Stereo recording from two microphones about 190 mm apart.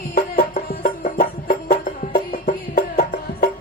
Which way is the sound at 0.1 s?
50° left (ahead or behind).